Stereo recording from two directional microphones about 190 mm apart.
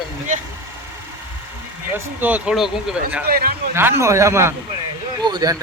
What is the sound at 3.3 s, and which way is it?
Speech, 50° right (ahead or behind).